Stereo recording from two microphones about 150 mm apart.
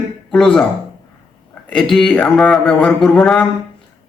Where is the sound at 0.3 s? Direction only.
5° left (ahead or behind).